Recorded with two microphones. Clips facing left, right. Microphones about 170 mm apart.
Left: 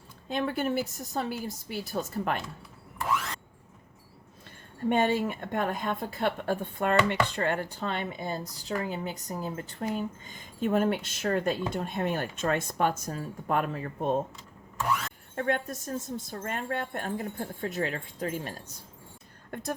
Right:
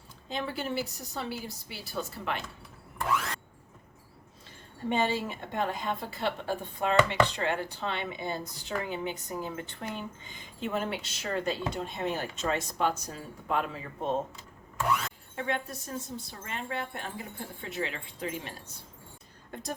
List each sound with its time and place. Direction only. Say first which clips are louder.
0.3 s a woman's voice: left 5 dB; 55° left (ahead or behind)
4.9 s a woman's voice: left 4 dB; 55° left (ahead or behind)
15.4 s a woman's voice: left 4 dB; 50° left (ahead or behind)